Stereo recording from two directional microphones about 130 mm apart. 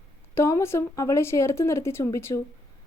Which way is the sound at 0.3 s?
20° left (ahead or behind).